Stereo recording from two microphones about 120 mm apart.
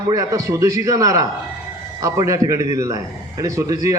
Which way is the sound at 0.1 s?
30° right (ahead or behind).